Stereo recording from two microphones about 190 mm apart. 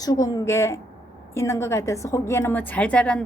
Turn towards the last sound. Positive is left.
turn(degrees=5)  # may be behind; listen again after turning